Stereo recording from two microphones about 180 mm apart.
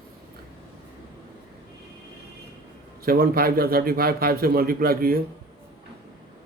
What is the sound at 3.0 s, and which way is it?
A man's voice, 55° right (ahead or behind).